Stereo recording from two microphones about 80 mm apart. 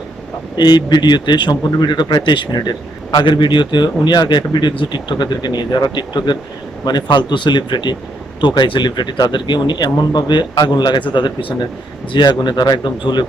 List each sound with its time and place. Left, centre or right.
0.5 s speech: left